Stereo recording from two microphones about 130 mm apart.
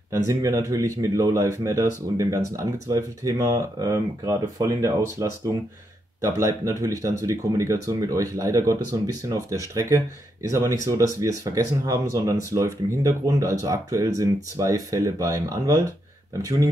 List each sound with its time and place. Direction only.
0.3 s speech: 25° right (ahead or behind)